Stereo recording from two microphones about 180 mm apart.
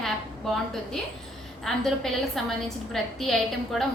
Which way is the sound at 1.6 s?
Centre (ahead or behind).